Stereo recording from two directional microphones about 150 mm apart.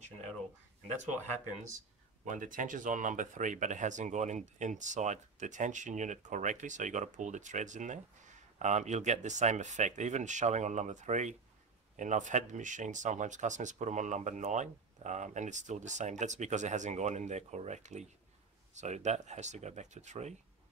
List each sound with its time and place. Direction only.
2.2 s speech: 60° right (ahead or behind)